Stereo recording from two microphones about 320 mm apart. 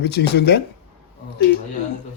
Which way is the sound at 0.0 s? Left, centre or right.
Left.